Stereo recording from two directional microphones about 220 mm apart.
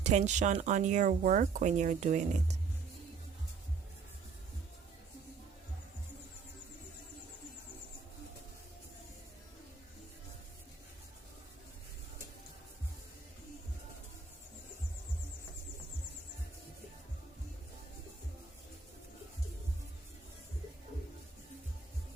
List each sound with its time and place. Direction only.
0.0 s speech: 30° right (ahead or behind)